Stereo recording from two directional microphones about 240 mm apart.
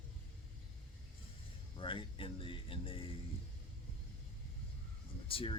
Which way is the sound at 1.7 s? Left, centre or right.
Left.